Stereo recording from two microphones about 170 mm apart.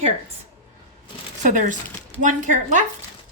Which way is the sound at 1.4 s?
50° right (ahead or behind).